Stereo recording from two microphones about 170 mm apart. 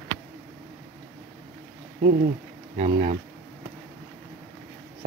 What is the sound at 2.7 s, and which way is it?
Speech, 35° right (ahead or behind).